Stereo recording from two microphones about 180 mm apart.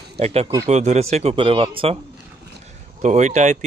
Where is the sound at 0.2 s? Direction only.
35° right (ahead or behind).